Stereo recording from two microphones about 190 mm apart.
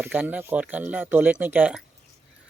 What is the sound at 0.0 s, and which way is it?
Speech, 10° right (ahead or behind).